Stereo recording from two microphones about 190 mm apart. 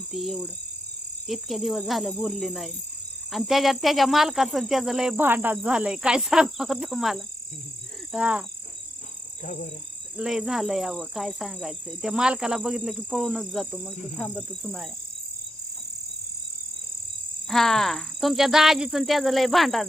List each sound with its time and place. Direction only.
0.1 s speech: centre (ahead or behind)
9.4 s speech: 45° left (ahead or behind)
10.2 s speech: centre (ahead or behind)
17.5 s speech: centre (ahead or behind)